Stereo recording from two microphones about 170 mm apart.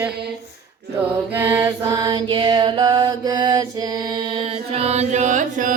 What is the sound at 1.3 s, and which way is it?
Mantra, 15° right (ahead or behind).